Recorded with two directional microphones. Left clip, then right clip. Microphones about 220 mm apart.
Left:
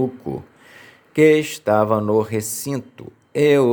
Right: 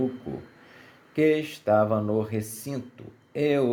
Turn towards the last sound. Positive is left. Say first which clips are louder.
# left 9 dB
turn(degrees=35)  # may be behind; listen again after turning